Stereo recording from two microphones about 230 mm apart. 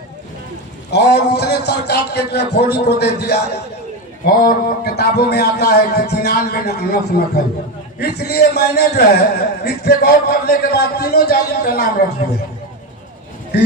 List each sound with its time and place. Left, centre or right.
0.9 s a man's voice: left